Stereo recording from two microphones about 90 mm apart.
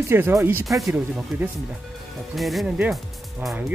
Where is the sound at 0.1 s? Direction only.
25° right (ahead or behind).